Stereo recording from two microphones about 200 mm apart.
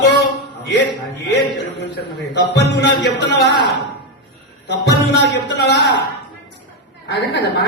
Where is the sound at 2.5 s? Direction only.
60° left (ahead or behind).